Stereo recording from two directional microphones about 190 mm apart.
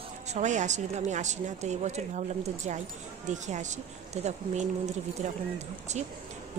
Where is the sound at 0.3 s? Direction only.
40° right (ahead or behind).